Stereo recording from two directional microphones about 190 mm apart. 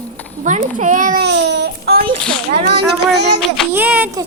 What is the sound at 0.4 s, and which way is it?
Speech, 40° right (ahead or behind).